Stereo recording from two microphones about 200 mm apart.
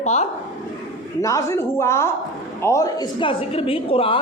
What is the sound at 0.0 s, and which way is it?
Speech, 35° left (ahead or behind).